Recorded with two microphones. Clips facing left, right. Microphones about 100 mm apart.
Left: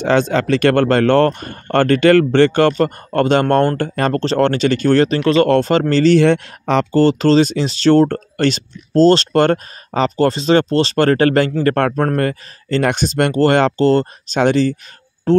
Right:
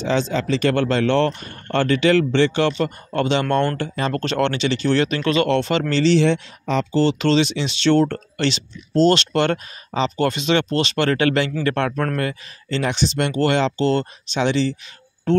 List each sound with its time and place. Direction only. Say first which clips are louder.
0.0 s speech: left 6 dB; 55° left (ahead or behind)
4.1 s speech: left 5 dB; 35° left (ahead or behind); by 7.0 s 65° left (ahead or behind)
7.0 s speech: left 5 dB; 40° left (ahead or behind)